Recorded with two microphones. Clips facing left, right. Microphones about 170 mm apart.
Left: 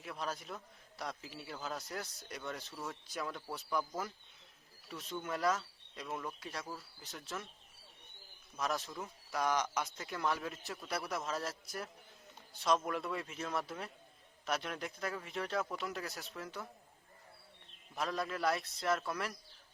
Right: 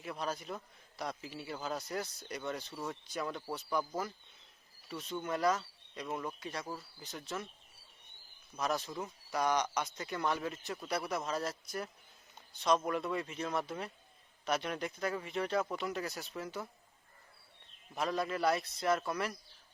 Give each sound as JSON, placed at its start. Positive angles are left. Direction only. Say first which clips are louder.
{"t": 0.0, "sound": "a man's voice", "louder": "right 3 dB", "side_deg": 0}
{"t": 8.5, "sound": "a man's voice", "louder": "right 3 dB", "side_deg": 0}
{"t": 17.9, "sound": "a man's voice", "louder": "right 3 dB", "side_deg": 0}